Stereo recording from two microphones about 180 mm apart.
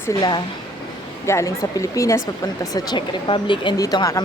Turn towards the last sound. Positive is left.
turn(degrees=20)  # may be behind; listen again after turning